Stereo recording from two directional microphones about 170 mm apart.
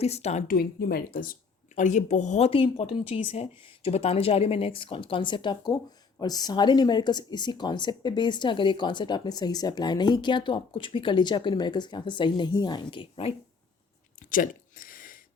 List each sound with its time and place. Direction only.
0.0 s speech: 40° left (ahead or behind)
0.5 s speech: 65° left (ahead or behind); by 13.3 s 30° left (ahead or behind)
14.2 s a sound: 50° left (ahead or behind)